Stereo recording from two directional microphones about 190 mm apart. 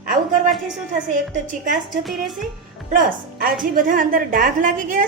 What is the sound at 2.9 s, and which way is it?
A woman's voice, 45° right (ahead or behind).